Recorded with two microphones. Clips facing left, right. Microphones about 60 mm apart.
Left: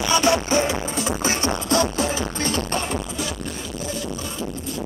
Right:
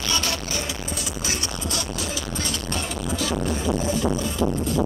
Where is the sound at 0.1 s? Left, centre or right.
Left.